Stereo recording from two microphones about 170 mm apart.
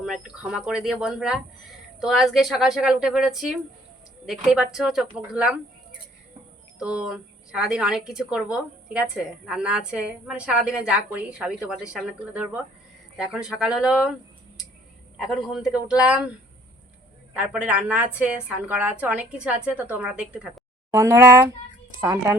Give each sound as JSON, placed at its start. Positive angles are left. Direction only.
{"t": 0.0, "sound": "a woman's voice", "side_deg": -5}
{"t": 6.7, "sound": "a woman's voice", "side_deg": -5}
{"t": 15.2, "sound": "a woman's voice", "side_deg": 0}
{"t": 17.3, "sound": "a woman's voice", "side_deg": -5}
{"t": 20.9, "sound": "a woman's voice", "side_deg": -15}